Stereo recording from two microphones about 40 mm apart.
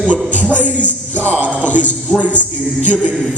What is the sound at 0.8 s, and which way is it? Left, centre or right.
Music, left.